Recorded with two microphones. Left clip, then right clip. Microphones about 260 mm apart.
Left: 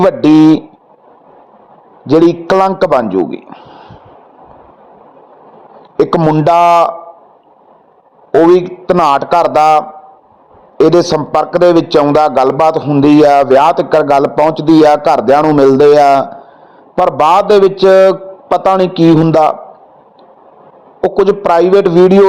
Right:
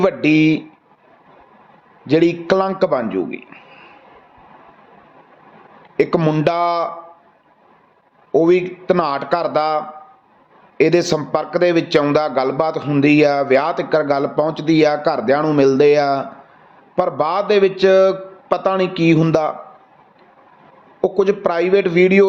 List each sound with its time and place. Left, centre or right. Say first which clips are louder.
0.0 s a man's voice: left 8 dB; centre
2.0 s a man's voice: left 6 dB; centre
6.0 s a man's voice: left 6 dB; centre
8.4 s a man's voice: left 7 dB; centre
21.0 s a man's voice: left 6 dB; centre